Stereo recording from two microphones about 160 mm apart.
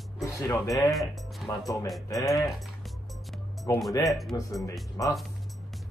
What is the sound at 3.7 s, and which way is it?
Speech, 20° left (ahead or behind).